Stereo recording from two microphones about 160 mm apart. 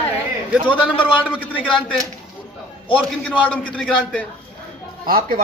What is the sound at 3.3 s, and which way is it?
Speech, 10° left (ahead or behind).